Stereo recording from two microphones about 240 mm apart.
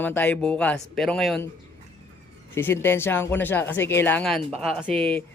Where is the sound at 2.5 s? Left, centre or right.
Centre.